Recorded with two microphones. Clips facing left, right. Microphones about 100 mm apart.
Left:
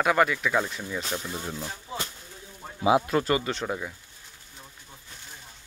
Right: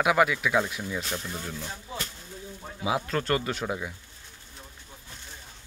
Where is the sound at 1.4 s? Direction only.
20° left (ahead or behind).